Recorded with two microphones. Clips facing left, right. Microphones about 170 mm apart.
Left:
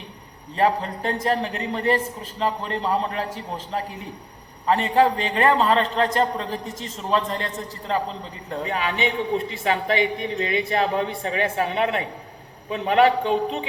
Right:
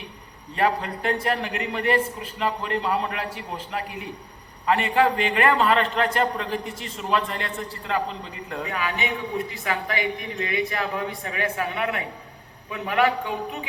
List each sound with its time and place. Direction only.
0.5 s a man's voice: 30° left (ahead or behind)